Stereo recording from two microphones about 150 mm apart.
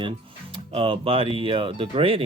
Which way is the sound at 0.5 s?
40° right (ahead or behind).